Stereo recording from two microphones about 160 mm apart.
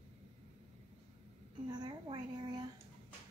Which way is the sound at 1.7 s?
30° right (ahead or behind).